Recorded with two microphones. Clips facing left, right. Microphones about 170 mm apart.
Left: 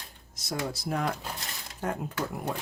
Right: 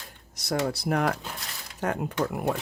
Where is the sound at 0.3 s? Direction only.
65° right (ahead or behind).